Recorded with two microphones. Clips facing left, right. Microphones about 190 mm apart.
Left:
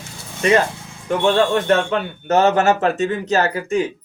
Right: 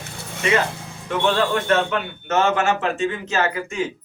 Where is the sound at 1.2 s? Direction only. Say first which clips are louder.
Left 4 dB; 35° left (ahead or behind).